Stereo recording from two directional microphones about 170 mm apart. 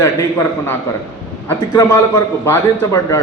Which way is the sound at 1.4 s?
20° left (ahead or behind).